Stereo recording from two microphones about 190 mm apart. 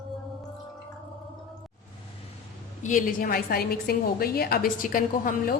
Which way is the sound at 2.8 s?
45° left (ahead or behind).